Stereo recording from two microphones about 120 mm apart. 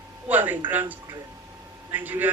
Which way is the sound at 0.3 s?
15° right (ahead or behind).